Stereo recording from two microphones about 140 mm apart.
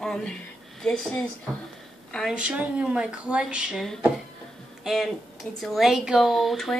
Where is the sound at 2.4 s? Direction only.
10° right (ahead or behind).